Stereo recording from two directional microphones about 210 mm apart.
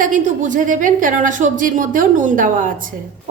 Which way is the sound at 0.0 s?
40° right (ahead or behind).